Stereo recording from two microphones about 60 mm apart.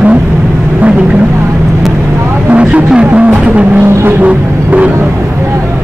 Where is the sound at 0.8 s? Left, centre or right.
Centre.